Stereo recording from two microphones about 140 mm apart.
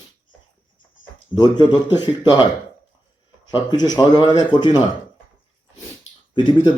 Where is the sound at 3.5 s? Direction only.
30° left (ahead or behind).